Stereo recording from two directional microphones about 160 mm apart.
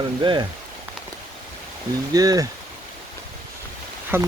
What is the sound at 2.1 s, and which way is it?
Speech, 25° right (ahead or behind).